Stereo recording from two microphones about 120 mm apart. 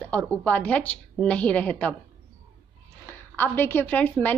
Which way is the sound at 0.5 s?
10° left (ahead or behind).